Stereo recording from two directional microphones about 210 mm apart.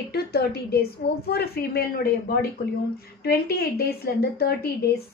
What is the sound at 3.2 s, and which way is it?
A woman's voice, 45° left (ahead or behind).